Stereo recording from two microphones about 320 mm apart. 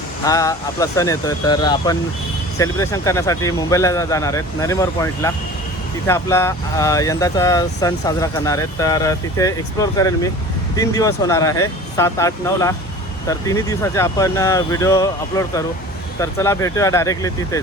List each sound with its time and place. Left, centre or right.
0.3 s speech: centre